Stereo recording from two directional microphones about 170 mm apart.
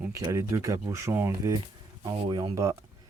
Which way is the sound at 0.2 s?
20° right (ahead or behind).